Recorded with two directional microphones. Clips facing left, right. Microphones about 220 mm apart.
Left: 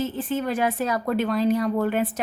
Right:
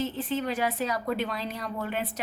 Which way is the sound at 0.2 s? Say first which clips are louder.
Left 4 dB; 50° left (ahead or behind).